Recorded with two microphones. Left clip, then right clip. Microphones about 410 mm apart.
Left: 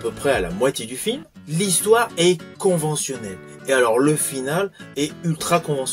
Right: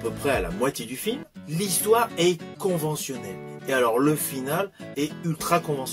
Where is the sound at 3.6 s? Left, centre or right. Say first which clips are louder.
Left 5 dB; right.